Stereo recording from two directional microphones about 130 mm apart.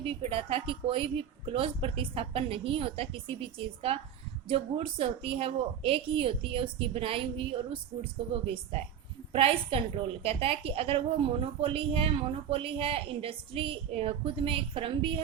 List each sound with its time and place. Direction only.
0.0 s a woman's voice: 45° right (ahead or behind)
4.4 s a woman's voice: 45° right (ahead or behind)